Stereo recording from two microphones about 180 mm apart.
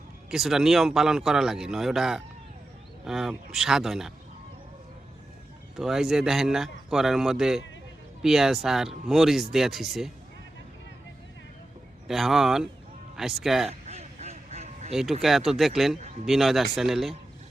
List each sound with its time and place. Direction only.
0.3 s a man's voice: centre (ahead or behind)
5.7 s a man's voice: centre (ahead or behind)
12.0 s a man's voice: centre (ahead or behind)
13.7 s quack: 35° right (ahead or behind)
15.2 s a man's voice: centre (ahead or behind)